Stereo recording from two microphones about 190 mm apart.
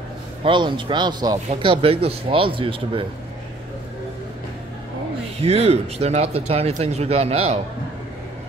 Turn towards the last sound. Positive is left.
turn(degrees=-35)  # may be behind; listen again after turning